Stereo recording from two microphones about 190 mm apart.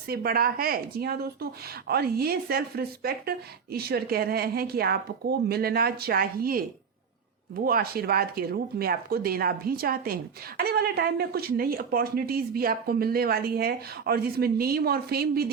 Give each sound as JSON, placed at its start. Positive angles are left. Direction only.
{"t": 0.1, "sound": "speech", "side_deg": -50}